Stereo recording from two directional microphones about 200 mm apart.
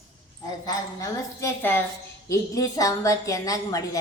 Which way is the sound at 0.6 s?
15° left (ahead or behind).